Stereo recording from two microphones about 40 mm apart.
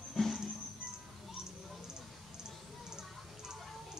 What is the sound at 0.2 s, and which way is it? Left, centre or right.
Music, centre.